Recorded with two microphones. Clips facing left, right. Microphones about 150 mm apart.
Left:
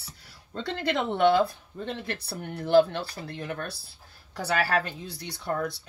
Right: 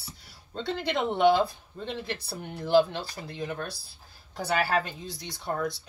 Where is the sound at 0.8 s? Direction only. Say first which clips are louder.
Even; 55° left (ahead or behind).